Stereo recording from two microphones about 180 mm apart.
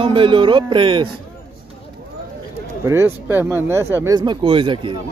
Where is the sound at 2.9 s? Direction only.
15° right (ahead or behind).